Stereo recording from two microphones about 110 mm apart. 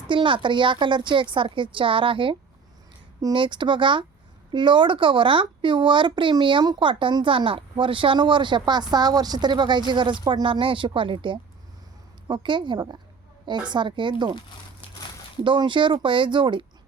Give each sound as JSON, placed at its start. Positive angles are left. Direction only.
{"t": 0.1, "sound": "speech", "side_deg": -50}
{"t": 3.3, "sound": "speech", "side_deg": -45}
{"t": 15.4, "sound": "speech", "side_deg": -45}